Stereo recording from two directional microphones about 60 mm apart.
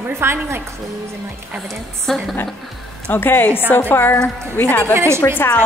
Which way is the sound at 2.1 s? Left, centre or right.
Centre.